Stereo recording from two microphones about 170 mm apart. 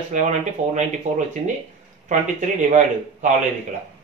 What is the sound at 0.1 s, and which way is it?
Speech, 45° right (ahead or behind).